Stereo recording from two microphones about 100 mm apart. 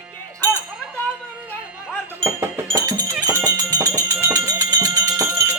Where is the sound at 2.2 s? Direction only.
25° right (ahead or behind).